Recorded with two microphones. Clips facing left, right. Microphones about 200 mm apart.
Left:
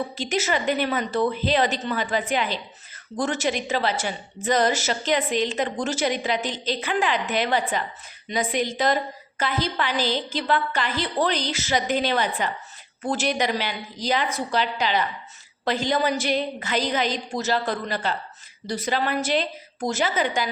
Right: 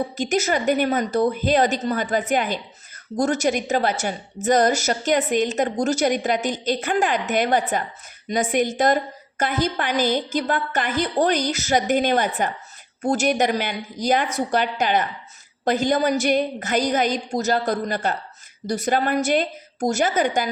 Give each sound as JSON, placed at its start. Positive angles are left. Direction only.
{"t": 0.2, "sound": "a woman's voice", "side_deg": -45}